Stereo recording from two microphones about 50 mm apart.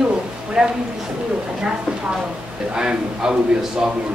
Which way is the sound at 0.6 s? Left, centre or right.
Centre.